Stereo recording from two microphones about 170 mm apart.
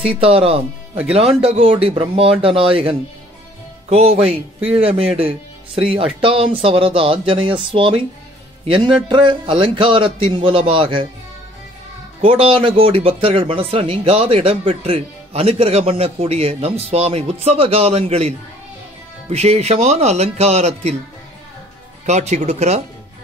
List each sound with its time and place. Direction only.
0.0 s a man's voice: 35° right (ahead or behind)
12.2 s speech: 35° right (ahead or behind)
22.0 s speech: 40° right (ahead or behind)